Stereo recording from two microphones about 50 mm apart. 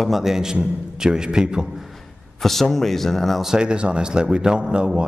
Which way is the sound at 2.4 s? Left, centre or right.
Centre.